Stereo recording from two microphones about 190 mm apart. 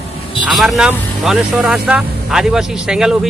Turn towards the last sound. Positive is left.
turn(degrees=-5)  # may be behind; listen again after turning